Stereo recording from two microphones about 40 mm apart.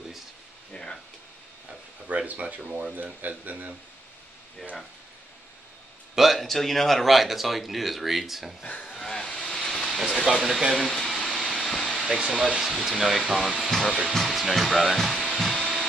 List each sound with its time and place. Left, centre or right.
0.7 s a sound: left
2.0 s a sound: right
2.9 s speech: right
6.1 s a sound: centre
6.4 s speech: centre
8.6 s speech: left
8.9 s vehicle: centre
10.1 s speech: centre
11.2 s a sound: centre
12.4 s speech: centre
12.7 s speech: centre
13.7 s speech: centre